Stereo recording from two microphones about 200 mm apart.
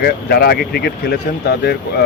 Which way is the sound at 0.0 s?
50° left (ahead or behind).